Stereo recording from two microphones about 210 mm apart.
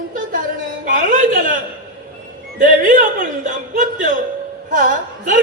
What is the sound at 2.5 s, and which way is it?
A woman's voice, 40° right (ahead or behind).